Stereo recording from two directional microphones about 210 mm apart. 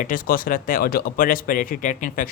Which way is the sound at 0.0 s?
40° left (ahead or behind).